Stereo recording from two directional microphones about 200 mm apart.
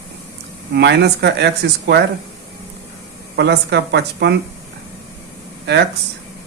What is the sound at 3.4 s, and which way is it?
Speech, 60° right (ahead or behind).